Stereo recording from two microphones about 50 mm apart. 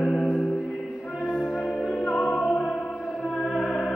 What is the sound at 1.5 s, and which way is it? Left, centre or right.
Music, left.